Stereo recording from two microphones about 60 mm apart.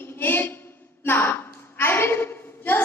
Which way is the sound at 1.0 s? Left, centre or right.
Left.